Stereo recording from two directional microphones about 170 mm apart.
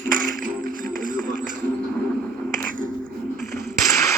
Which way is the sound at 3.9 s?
20° left (ahead or behind).